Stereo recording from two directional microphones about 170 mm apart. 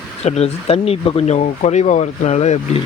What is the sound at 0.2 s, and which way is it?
Speech, 40° left (ahead or behind).